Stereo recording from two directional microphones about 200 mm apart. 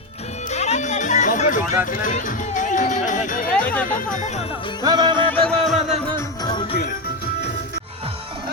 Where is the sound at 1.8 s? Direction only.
40° left (ahead or behind).